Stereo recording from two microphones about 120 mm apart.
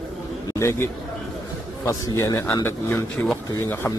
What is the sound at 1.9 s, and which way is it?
A man's voice, 25° left (ahead or behind).